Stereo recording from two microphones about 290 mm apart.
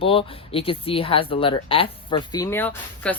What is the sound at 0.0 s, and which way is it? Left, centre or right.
Speech, centre.